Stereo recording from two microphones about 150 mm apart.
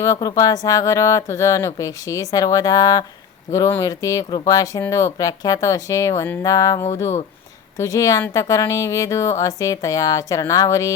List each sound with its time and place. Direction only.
0.0 s speech: 25° left (ahead or behind)